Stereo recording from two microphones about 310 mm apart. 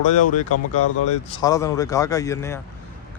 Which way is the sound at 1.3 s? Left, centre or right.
Centre.